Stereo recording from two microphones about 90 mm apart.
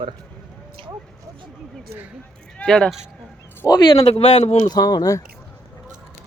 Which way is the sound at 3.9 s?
90° left.